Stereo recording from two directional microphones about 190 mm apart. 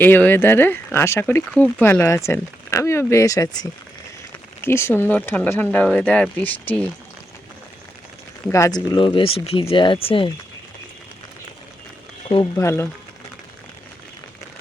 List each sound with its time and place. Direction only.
0.0 s speech: 10° left (ahead or behind)
8.4 s speech: 15° left (ahead or behind)
12.5 s speech: 15° left (ahead or behind)